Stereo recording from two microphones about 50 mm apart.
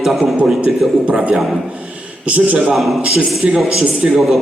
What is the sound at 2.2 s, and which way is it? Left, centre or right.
Speech, right.